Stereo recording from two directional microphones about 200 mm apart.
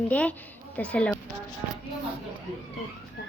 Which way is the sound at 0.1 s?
5° left (ahead or behind).